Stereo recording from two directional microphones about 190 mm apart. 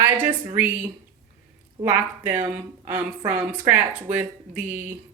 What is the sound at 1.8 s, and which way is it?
Speech, 10° right (ahead or behind).